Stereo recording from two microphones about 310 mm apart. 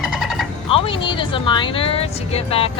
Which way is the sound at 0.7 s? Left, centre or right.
Centre.